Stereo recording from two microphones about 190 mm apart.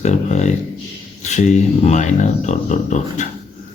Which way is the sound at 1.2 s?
40° left (ahead or behind).